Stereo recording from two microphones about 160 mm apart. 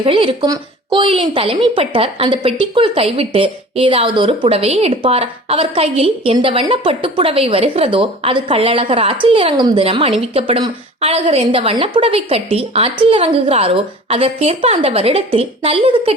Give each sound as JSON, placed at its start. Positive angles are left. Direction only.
{"t": 0.0, "sound": "a woman's voice", "side_deg": -35}